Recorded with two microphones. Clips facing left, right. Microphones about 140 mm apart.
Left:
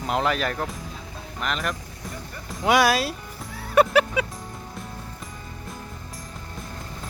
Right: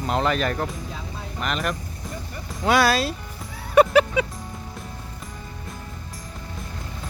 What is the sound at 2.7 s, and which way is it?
Speech, 15° left (ahead or behind).